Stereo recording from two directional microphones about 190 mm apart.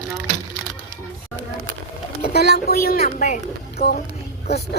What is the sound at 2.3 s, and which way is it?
A woman's voice, 55° left (ahead or behind).